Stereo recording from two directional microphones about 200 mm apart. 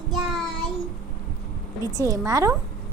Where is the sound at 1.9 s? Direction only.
15° right (ahead or behind).